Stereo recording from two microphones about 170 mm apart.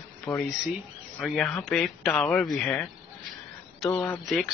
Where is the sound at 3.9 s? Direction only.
15° left (ahead or behind).